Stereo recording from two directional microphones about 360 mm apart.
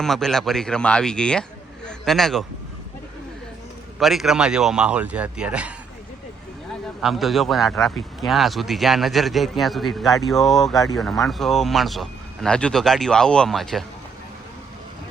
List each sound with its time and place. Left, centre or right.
0.0 s a man's voice: centre
4.0 s a man's voice: centre
7.0 s a man's voice: centre